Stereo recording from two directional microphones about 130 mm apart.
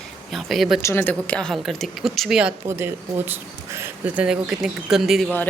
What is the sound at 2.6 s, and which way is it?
Speech, 20° right (ahead or behind).